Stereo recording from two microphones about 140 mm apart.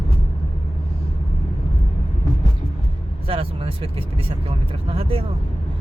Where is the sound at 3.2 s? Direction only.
40° right (ahead or behind).